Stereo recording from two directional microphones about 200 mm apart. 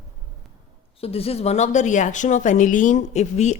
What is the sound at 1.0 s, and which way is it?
Speech, 30° left (ahead or behind).